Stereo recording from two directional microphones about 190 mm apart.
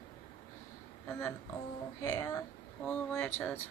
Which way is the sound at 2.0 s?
15° left (ahead or behind).